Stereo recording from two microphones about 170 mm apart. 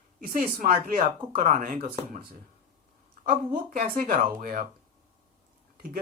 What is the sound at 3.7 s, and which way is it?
Speech, 50° right (ahead or behind).